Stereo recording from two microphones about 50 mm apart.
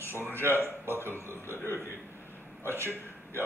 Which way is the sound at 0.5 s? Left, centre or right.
Right.